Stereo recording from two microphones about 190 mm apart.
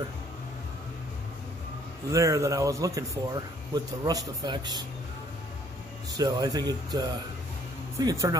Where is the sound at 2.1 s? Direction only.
15° right (ahead or behind).